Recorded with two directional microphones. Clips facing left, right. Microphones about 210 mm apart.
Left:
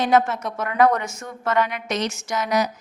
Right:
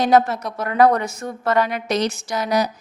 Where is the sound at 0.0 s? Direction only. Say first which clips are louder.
Right 3 dB; 35° right (ahead or behind).